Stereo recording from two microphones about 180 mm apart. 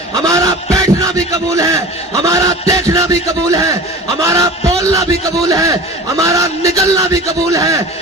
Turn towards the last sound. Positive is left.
turn(degrees=-15)  # may be behind; listen again after turning